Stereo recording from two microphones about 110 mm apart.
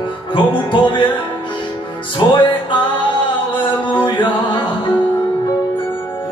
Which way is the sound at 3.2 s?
50° left (ahead or behind).